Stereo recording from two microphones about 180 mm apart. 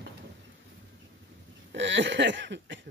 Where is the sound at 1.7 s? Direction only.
85° right.